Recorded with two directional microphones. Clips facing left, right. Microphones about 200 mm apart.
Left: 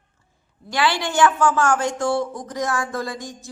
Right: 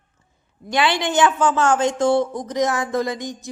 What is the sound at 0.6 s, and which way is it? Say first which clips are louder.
A woman's voice: right 2 dB; 20° right (ahead or behind).